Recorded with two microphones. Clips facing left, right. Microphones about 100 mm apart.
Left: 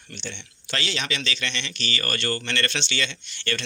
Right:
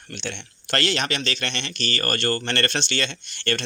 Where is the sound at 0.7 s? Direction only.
60° right (ahead or behind).